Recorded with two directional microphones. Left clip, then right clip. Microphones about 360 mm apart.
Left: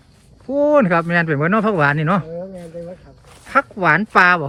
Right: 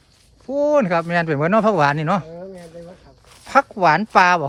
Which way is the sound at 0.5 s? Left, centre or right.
Centre.